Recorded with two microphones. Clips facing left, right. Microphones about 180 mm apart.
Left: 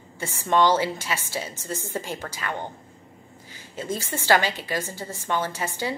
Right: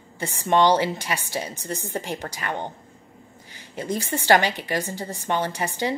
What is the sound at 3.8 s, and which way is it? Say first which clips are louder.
A woman's voice: right 3 dB; 15° right (ahead or behind).